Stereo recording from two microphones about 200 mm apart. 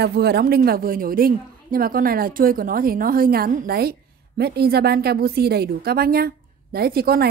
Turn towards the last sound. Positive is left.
turn(degrees=-50)  # may be behind; listen again after turning